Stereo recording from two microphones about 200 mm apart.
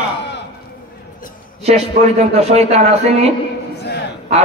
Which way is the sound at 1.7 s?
30° right (ahead or behind).